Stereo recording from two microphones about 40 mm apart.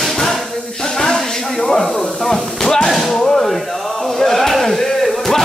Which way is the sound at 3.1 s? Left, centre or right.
Centre.